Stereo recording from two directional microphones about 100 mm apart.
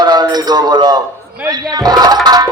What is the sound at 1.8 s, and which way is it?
Speech, 40° right (ahead or behind).